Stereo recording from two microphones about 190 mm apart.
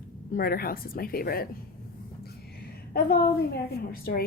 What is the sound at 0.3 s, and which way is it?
A woman's voice, 50° left (ahead or behind).